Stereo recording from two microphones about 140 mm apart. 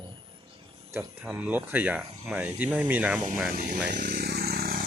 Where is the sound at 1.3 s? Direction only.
10° right (ahead or behind).